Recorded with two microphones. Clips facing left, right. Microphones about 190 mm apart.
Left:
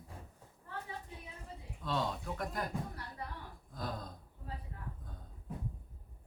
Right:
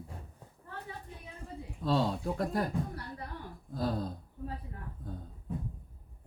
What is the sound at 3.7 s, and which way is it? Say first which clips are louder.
Gasp: right 9 dB; 30° right (ahead or behind).